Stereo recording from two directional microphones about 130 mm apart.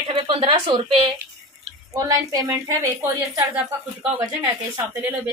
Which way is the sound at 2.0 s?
30° right (ahead or behind).